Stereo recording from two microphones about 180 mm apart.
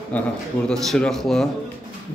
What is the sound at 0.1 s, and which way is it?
A man's voice, 10° left (ahead or behind).